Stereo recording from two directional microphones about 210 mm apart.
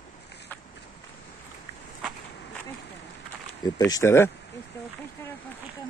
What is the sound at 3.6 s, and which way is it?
Speech, 20° left (ahead or behind).